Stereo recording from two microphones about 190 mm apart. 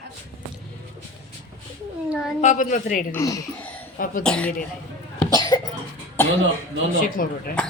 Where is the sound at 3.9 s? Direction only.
45° left (ahead or behind).